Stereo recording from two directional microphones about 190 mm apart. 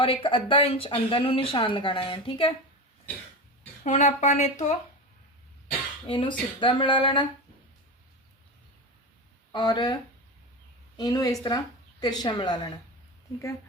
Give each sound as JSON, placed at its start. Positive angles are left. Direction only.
{"t": 0.0, "sound": "speech", "side_deg": 25}
{"t": 3.1, "sound": "cough", "side_deg": 10}
{"t": 3.8, "sound": "speech", "side_deg": 40}
{"t": 6.1, "sound": "speech", "side_deg": 25}
{"t": 9.5, "sound": "speech", "side_deg": 20}